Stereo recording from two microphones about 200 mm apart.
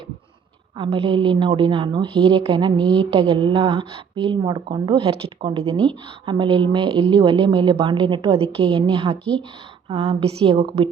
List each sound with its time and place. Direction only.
0.8 s a woman's voice: 30° right (ahead or behind)
10.2 s a woman's voice: 25° right (ahead or behind)